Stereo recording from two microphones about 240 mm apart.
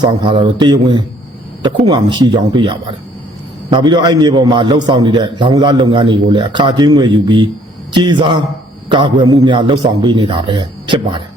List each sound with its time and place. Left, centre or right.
0.0 s a man's voice: centre